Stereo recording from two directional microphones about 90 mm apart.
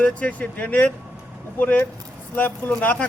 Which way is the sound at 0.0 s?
15° left (ahead or behind).